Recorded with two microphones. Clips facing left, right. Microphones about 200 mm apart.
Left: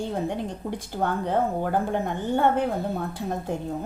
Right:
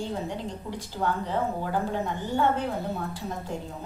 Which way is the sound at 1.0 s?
55° left (ahead or behind).